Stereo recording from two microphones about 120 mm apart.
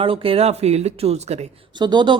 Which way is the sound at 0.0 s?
50° right (ahead or behind).